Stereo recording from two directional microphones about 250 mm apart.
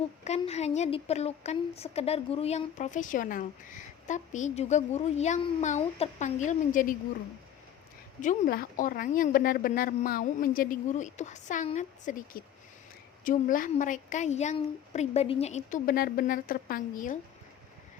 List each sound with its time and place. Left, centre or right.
0.3 s a woman's voice: left
8.2 s a woman's voice: left